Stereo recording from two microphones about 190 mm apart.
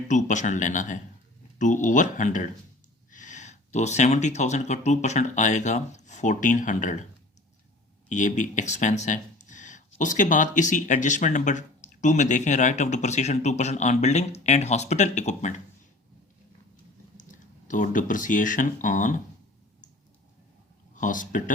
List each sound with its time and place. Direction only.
0.1 s speech: 40° left (ahead or behind)
8.1 s speech: 40° left (ahead or behind)
17.7 s speech: 45° left (ahead or behind)
20.9 s speech: 45° left (ahead or behind)